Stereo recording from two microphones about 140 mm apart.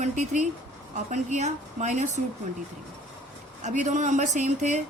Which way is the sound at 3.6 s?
60° right (ahead or behind).